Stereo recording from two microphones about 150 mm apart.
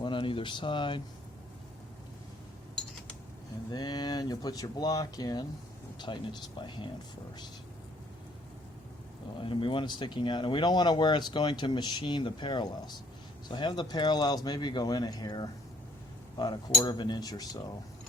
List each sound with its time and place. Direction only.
0.0 s speech: 35° left (ahead or behind)
3.7 s speech: 25° left (ahead or behind)
9.4 s speech: 35° left (ahead or behind)